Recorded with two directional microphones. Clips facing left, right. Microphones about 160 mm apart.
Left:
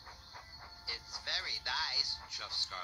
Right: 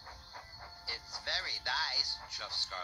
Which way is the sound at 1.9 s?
50° right (ahead or behind).